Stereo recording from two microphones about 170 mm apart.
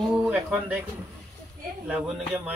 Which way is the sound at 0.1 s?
5° right (ahead or behind).